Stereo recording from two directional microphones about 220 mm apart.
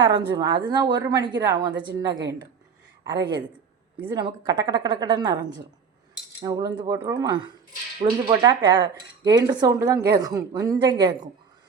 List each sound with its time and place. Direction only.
0.0 s a woman's voice: 20° right (ahead or behind)
6.4 s a woman's voice: 15° right (ahead or behind)